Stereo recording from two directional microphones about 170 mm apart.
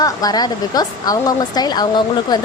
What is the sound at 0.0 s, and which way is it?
A woman's voice, 20° left (ahead or behind).